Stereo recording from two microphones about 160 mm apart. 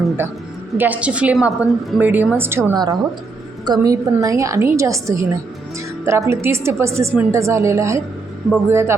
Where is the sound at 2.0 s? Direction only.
10° right (ahead or behind).